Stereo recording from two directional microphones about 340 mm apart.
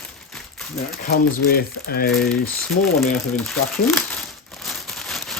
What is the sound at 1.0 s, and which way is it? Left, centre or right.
Speech, left.